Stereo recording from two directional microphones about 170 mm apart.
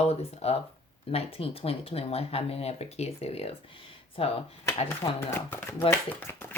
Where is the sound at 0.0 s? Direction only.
35° left (ahead or behind).